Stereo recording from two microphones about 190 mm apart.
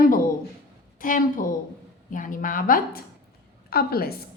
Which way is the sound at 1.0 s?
45° left (ahead or behind).